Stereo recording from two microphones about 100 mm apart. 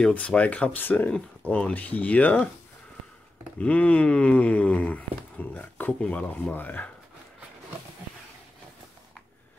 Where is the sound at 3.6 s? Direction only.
15° left (ahead or behind).